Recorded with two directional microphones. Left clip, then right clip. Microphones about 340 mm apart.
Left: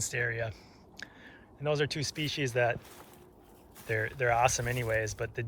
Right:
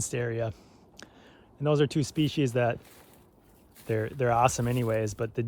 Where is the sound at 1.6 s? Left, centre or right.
Centre.